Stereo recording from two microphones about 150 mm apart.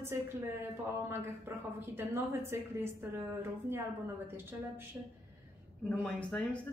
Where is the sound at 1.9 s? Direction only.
15° right (ahead or behind).